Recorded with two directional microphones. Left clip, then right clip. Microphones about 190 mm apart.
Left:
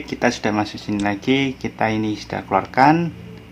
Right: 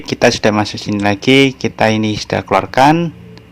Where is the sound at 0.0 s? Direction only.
40° right (ahead or behind).